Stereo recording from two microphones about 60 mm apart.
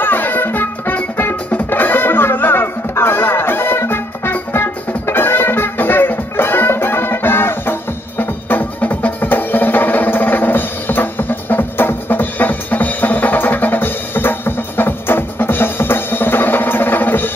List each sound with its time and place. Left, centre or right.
0.0 s music: left